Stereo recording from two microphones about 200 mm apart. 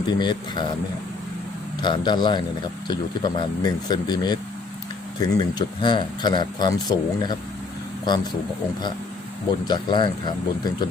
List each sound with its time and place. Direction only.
0.2 s speech: 20° left (ahead or behind)
1.8 s speech: 20° left (ahead or behind)
9.6 s speech: 20° left (ahead or behind)